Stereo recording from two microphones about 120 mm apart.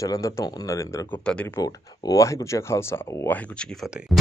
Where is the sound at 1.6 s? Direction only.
30° left (ahead or behind); by 3.7 s 15° left (ahead or behind).